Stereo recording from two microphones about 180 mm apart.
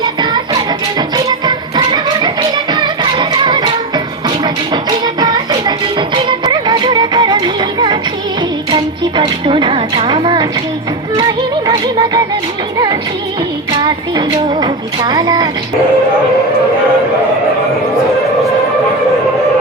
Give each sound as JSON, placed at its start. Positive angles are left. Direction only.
{"t": 0.0, "sound": "music", "side_deg": -25}
{"t": 8.7, "sound": "speech", "side_deg": -30}
{"t": 13.7, "sound": "speech", "side_deg": -20}